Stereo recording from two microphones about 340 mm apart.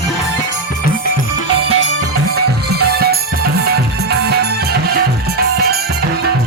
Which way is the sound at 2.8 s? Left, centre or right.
Right.